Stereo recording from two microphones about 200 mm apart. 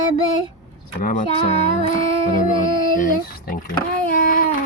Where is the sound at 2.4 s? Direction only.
40° left (ahead or behind).